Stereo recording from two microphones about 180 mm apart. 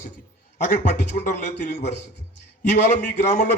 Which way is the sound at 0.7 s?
45° left (ahead or behind).